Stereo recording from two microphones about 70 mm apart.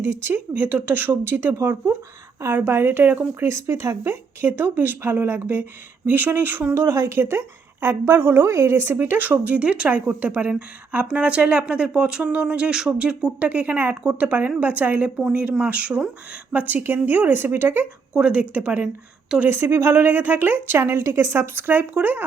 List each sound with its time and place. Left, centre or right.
0.0 s speech: right
3.5 s speech: right
18.2 s speech: centre
20.8 s speech: right